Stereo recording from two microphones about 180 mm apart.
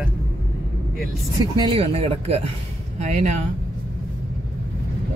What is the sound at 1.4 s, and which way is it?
Speech, 25° right (ahead or behind).